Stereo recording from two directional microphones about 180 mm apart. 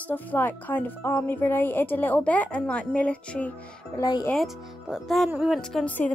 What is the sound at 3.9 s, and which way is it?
Speech, 25° left (ahead or behind).